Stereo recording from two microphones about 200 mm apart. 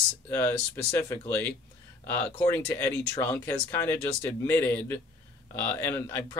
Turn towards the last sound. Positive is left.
turn(degrees=15)  # may be behind; listen again after turning